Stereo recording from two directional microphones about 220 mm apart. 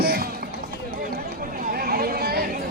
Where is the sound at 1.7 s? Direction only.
40° right (ahead or behind).